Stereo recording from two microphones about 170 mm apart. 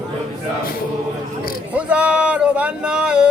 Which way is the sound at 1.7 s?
10° right (ahead or behind).